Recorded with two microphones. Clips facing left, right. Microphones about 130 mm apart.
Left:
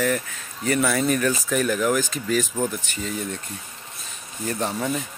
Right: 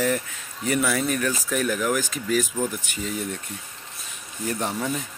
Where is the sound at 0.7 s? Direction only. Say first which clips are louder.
Left 2 dB; 5° right (ahead or behind).